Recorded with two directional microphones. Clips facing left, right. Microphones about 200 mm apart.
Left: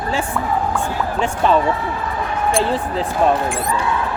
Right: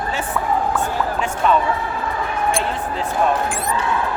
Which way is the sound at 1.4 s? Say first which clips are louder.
Left 2 dB; 30° left (ahead or behind).